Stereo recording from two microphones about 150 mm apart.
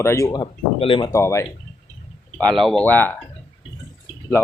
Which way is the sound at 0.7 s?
35° left (ahead or behind).